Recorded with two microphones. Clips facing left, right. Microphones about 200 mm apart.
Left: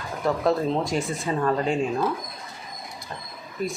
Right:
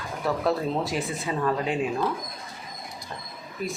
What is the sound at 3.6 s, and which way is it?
Speech, centre (ahead or behind).